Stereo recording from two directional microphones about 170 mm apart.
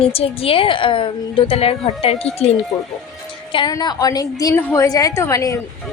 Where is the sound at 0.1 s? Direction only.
35° left (ahead or behind).